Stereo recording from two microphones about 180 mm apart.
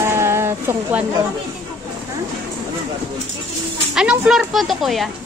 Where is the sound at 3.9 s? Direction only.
5° right (ahead or behind).